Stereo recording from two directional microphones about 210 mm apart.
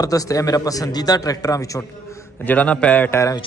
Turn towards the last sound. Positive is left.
turn(degrees=15)  # may be behind; listen again after turning